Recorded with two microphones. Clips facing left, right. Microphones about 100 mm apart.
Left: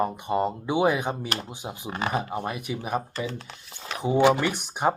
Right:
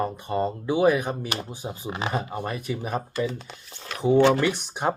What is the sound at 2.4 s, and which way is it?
Speech, 10° left (ahead or behind).